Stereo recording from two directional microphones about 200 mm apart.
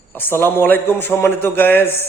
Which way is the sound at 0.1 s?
10° left (ahead or behind).